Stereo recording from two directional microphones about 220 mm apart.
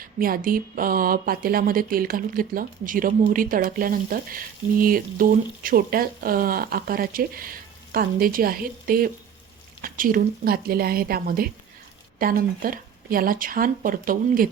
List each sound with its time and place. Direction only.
0.0 s a woman's voice: 40° right (ahead or behind)